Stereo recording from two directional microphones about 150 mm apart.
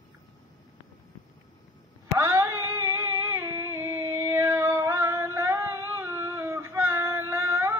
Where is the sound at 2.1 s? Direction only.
20° right (ahead or behind).